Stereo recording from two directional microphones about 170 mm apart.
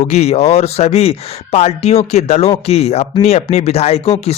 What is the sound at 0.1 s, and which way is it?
Speech, 40° left (ahead or behind).